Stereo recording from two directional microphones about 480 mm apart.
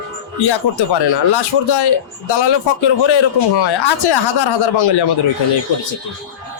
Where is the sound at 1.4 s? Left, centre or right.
Left.